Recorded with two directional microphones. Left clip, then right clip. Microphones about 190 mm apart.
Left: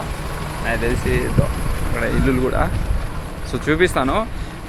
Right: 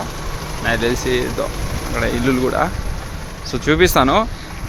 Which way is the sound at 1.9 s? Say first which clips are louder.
Right 2 dB; 25° right (ahead or behind).